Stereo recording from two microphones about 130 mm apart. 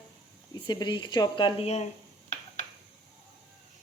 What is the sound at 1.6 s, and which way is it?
Speech, 55° left (ahead or behind).